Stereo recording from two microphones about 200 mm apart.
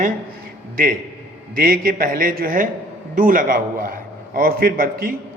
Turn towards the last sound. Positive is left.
turn(degrees=-45)  # may be behind; listen again after turning